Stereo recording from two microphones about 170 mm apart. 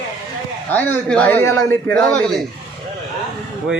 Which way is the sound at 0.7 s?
10° left (ahead or behind).